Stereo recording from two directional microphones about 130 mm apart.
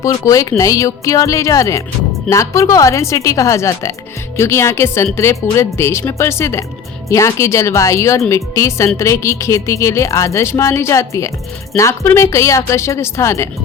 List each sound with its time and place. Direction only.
0.0 s speech: 25° left (ahead or behind)